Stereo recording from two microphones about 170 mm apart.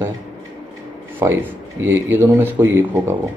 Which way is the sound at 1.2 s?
15° right (ahead or behind).